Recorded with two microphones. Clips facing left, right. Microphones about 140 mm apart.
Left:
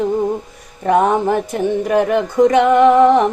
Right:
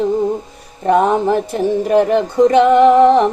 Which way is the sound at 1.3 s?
30° right (ahead or behind).